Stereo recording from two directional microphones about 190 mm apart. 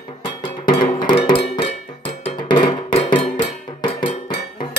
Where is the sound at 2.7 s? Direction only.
30° left (ahead or behind).